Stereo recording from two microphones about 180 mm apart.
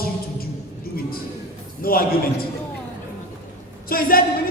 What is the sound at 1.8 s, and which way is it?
Speech, 55° left (ahead or behind).